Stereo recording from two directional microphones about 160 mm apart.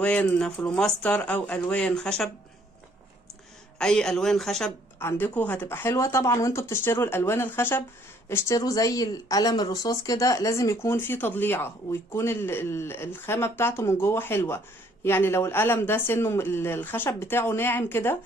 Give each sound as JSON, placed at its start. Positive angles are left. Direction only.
{"t": 0.0, "sound": "speech", "side_deg": 5}
{"t": 3.8, "sound": "speech", "side_deg": 5}
{"t": 4.9, "sound": "speech", "side_deg": 15}